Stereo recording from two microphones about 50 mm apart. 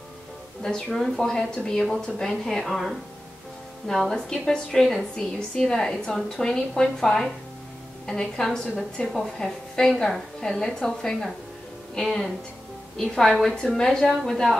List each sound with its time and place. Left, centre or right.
0.6 s speech: centre
0.8 s speech: centre
13.3 s a woman's voice: centre